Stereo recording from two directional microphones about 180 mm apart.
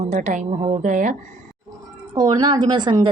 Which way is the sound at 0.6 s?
30° right (ahead or behind).